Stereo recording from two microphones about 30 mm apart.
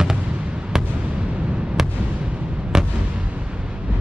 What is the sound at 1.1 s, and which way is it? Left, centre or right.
Artillery fire, right.